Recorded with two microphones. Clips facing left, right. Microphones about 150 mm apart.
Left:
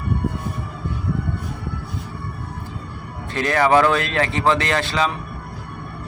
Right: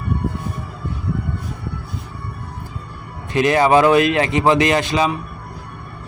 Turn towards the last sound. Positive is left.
turn(degrees=-15)  # may be behind; listen again after turning